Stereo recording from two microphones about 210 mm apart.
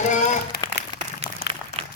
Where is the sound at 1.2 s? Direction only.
55° left (ahead or behind).